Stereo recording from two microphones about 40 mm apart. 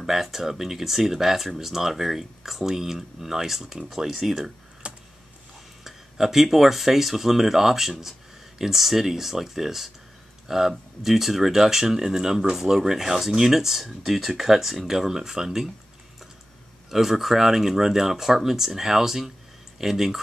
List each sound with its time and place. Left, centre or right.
0.0 s speech: centre
4.8 s a sound: right
5.9 s speech: centre
16.9 s speech: centre